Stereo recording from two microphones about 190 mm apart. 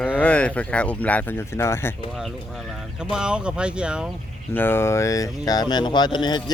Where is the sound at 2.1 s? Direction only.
Centre (ahead or behind).